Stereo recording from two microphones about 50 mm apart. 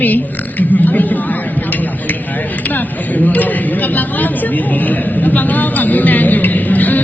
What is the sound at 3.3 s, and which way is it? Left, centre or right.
Speech, left.